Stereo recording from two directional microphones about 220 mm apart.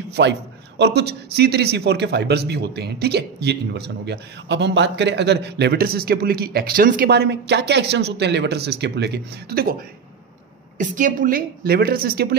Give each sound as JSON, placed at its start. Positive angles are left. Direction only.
{"t": 0.1, "sound": "a man's voice", "side_deg": -50}
{"t": 10.8, "sound": "a man's voice", "side_deg": -35}